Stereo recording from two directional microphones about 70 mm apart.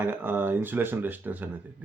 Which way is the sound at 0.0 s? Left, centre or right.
Right.